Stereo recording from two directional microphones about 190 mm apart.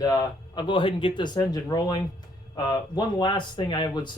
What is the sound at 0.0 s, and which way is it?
Speech, 20° left (ahead or behind).